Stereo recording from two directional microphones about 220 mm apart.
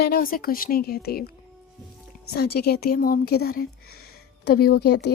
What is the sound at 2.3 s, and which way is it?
A woman's voice, 45° left (ahead or behind).